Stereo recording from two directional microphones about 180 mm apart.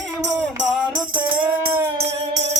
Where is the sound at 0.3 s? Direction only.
Centre (ahead or behind).